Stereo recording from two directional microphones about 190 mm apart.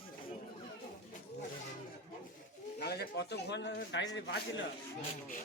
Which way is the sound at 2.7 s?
55° left (ahead or behind).